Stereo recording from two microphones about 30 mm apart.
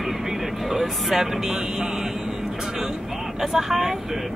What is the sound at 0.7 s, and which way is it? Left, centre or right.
Speech, centre.